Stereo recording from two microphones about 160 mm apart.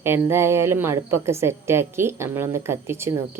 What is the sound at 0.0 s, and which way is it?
Speech, 15° right (ahead or behind).